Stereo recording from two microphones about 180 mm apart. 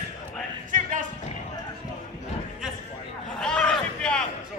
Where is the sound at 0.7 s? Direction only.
45° right (ahead or behind).